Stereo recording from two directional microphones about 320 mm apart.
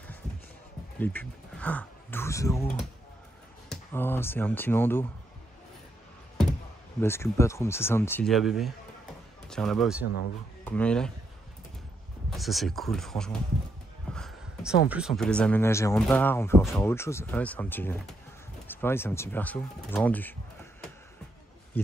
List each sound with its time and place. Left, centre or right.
0.9 s speech: centre
7.0 s speech: centre
12.3 s speech: centre
21.7 s speech: centre